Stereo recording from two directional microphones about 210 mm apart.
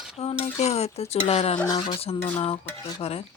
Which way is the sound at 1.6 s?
20° left (ahead or behind).